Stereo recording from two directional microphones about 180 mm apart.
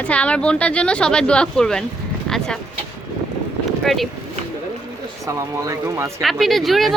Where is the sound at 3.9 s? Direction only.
Centre (ahead or behind).